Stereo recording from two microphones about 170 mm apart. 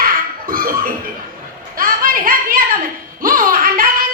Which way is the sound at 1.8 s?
55° right (ahead or behind).